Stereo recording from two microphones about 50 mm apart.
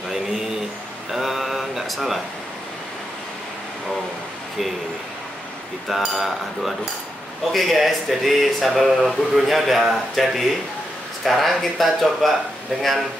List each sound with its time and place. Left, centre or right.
0.1 s a sound: centre
1.1 s mantra: centre
5.9 s speech: centre